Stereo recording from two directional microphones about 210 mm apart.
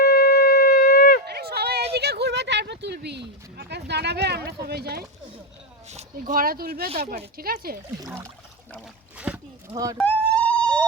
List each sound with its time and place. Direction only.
0.0 s shofar: 45° left (ahead or behind)
1.2 s run: 50° right (ahead or behind)
1.9 s speech: 50° right (ahead or behind)
5.9 s speech: 35° right (ahead or behind)
8.0 s speech: 10° right (ahead or behind)
9.1 s a sound: 5° right (ahead or behind)
9.7 s speech: 15° right (ahead or behind)
10.0 s a sound: 5° left (ahead or behind)